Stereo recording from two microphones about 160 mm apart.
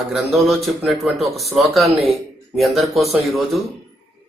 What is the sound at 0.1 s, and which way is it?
A man's voice, centre (ahead or behind).